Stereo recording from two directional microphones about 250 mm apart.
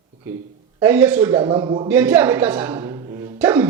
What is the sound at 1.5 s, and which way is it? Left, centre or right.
Speech, centre.